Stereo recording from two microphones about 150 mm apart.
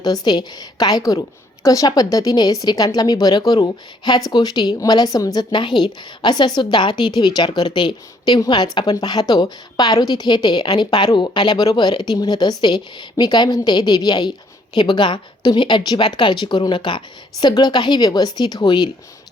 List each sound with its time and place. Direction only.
0.0 s a woman's voice: 30° left (ahead or behind)